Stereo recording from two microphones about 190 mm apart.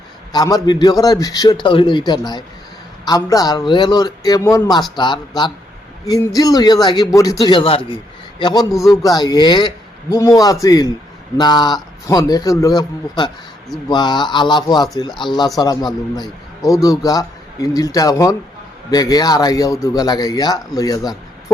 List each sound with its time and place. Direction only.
0.3 s a man's voice: 20° left (ahead or behind)